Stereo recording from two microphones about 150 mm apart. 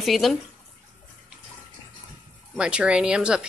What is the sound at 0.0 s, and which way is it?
Speech, centre (ahead or behind).